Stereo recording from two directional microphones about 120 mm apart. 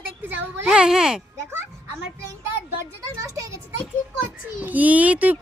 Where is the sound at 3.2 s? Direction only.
30° right (ahead or behind).